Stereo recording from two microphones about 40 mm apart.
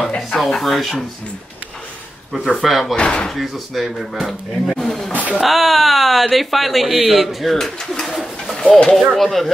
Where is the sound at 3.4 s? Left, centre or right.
Centre.